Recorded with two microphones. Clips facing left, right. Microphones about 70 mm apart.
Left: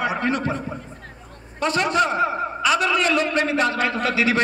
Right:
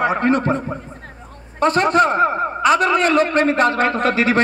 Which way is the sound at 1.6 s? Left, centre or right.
Right.